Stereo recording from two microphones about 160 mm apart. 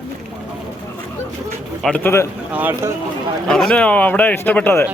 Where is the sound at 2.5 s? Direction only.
10° right (ahead or behind).